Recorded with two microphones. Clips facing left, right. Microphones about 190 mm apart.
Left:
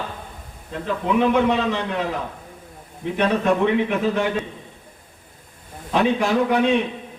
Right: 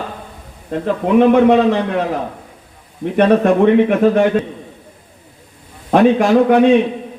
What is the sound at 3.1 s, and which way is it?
A man's voice, 55° right (ahead or behind).